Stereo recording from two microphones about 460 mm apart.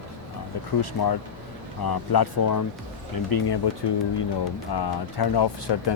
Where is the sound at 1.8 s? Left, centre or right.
Left.